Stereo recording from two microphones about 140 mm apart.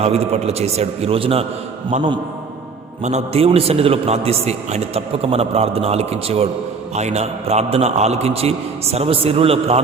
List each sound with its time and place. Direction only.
0.0 s a man's voice: 45° right (ahead or behind)
3.0 s a man's voice: 55° right (ahead or behind)